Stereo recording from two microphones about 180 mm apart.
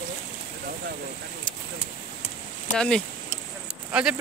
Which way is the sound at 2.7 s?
5° left (ahead or behind).